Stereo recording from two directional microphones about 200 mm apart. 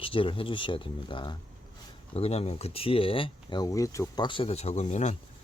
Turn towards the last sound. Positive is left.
turn(degrees=35)  # may be behind; listen again after turning